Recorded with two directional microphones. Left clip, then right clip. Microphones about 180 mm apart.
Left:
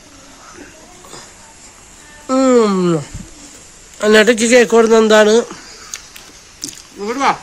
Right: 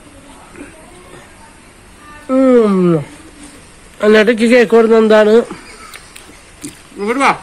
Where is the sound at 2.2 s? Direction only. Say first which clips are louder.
Right 2 dB; 25° left (ahead or behind).